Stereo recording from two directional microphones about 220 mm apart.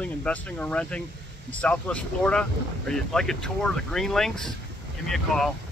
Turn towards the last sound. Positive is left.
turn(degrees=0)  # may be behind; listen again after turning